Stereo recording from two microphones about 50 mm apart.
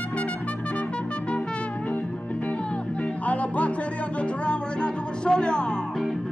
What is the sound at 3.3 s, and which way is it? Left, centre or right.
Music, left.